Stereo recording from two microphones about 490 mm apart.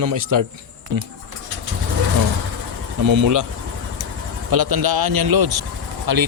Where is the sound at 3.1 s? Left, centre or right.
Right.